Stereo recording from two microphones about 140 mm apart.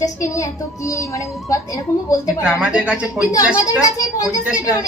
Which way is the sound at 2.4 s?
10° right (ahead or behind).